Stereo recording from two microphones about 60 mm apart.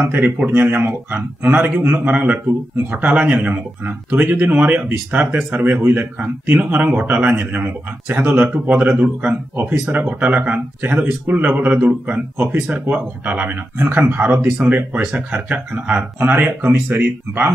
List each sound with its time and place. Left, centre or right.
0.0 s a man's voice: right
16.3 s a man's voice: right